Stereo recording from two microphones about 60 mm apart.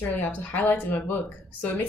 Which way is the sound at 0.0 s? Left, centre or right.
Left.